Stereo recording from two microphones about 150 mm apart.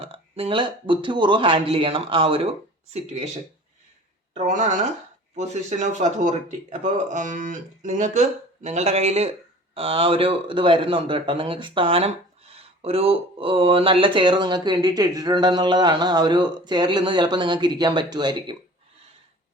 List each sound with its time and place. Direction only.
0.0 s speech: 40° right (ahead or behind)
4.4 s speech: 50° right (ahead or behind); by 18.5 s 30° right (ahead or behind)